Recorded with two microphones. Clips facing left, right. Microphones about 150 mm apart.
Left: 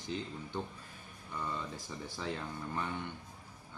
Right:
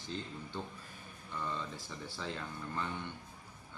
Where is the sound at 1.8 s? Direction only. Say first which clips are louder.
Left 2 dB; 15° left (ahead or behind).